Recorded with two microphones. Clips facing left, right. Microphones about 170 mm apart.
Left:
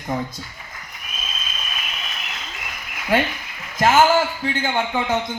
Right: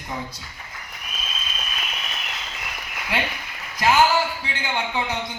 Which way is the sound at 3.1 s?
50° left (ahead or behind).